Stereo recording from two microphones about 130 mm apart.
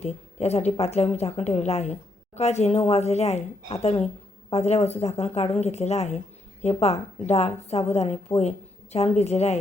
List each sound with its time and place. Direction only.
0.0 s a woman's voice: 55° left (ahead or behind)